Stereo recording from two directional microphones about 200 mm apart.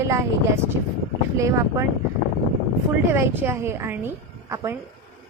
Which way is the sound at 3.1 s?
10° right (ahead or behind).